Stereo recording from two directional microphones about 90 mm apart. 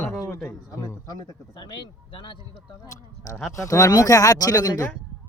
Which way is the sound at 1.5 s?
60° left (ahead or behind).